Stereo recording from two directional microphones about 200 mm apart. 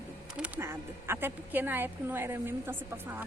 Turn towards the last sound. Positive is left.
turn(degrees=-10)  # may be behind; listen again after turning